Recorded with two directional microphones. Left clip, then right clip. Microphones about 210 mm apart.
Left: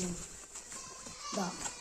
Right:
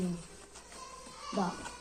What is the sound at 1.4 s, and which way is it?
Speech, 25° left (ahead or behind).